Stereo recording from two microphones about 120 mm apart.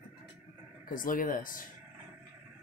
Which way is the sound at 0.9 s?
90° left.